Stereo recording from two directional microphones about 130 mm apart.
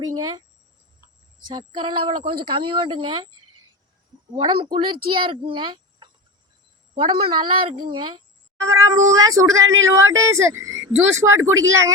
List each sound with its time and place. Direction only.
0.0 s speech: 30° right (ahead or behind)
1.5 s a child's voice: 40° right (ahead or behind)
4.4 s a child's voice: 35° right (ahead or behind)
8.7 s speech: 25° right (ahead or behind)